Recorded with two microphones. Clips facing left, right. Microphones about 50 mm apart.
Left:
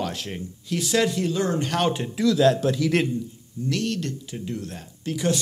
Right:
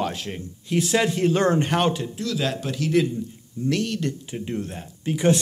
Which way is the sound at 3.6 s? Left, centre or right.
Right.